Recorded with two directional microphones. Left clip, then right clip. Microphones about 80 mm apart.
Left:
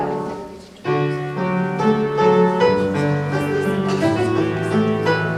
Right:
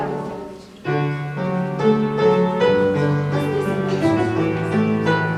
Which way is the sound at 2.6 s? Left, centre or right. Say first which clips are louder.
Even; left.